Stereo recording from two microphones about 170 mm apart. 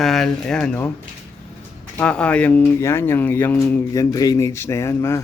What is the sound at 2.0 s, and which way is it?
A man's voice, 5° left (ahead or behind).